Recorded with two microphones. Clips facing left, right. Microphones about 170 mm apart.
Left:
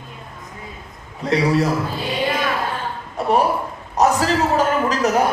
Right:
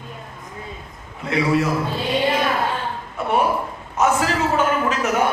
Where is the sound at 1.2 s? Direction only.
35° left (ahead or behind).